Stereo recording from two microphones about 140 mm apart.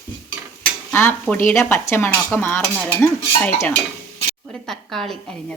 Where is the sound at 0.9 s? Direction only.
15° left (ahead or behind).